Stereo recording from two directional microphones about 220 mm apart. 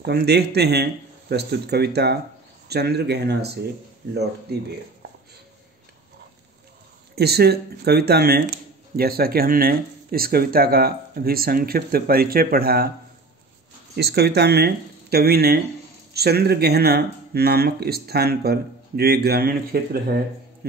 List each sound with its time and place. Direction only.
0.0 s speech: 45° right (ahead or behind)
7.2 s speech: 45° right (ahead or behind)
13.9 s speech: 45° right (ahead or behind)